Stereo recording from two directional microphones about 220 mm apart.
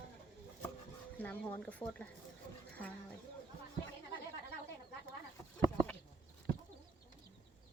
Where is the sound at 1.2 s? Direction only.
5° left (ahead or behind).